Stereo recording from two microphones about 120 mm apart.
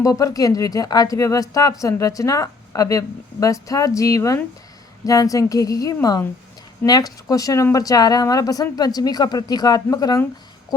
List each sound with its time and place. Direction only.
0.0 s a woman's voice: 30° left (ahead or behind)
7.3 s speech: 30° left (ahead or behind)